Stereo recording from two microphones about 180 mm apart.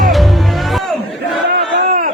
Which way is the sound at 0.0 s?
Centre (ahead or behind).